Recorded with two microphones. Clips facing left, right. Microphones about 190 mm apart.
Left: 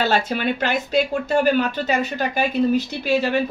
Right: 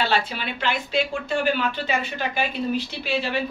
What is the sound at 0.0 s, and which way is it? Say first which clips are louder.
Speech: left 4 dB; 45° left (ahead or behind).